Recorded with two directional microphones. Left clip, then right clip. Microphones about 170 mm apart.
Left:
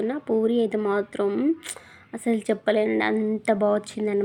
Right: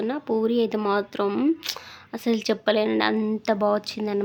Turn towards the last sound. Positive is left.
turn(degrees=0)  # may be behind; listen again after turning